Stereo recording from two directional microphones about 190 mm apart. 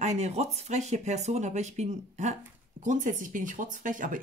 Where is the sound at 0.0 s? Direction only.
35° right (ahead or behind).